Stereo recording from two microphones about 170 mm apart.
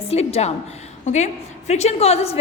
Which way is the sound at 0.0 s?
35° left (ahead or behind).